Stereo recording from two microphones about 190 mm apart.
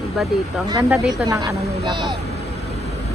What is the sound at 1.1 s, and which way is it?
Speech, 20° right (ahead or behind).